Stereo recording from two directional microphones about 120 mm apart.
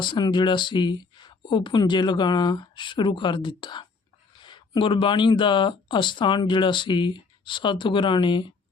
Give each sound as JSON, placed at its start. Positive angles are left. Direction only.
{"t": 0.0, "sound": "speech", "side_deg": 40}